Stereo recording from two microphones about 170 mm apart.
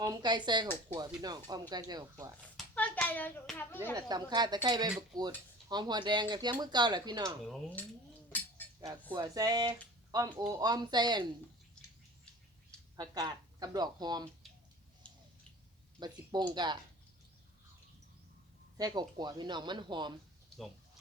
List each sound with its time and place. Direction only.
0.0 s speech: 20° right (ahead or behind)
2.7 s hands: 10° left (ahead or behind)
3.9 s speech: 25° right (ahead or behind)
9.1 s speech: 25° right (ahead or behind)
13.0 s speech: 20° right (ahead or behind)
15.1 s a sound: 5° left (ahead or behind)
16.0 s speech: 25° right (ahead or behind)
18.8 s speech: 25° right (ahead or behind)